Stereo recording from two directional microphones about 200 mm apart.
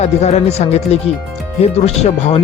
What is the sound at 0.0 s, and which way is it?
Speech, 35° left (ahead or behind).